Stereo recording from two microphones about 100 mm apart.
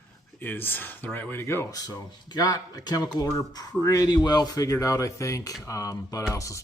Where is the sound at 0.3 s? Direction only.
20° left (ahead or behind).